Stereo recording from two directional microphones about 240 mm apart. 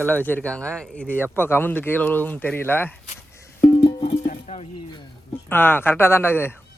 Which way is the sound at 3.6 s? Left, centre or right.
Centre.